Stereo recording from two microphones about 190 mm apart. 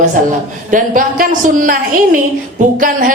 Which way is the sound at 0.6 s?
45° right (ahead or behind).